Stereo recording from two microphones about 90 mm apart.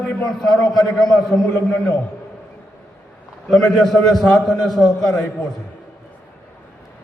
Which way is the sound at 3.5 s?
5° left (ahead or behind).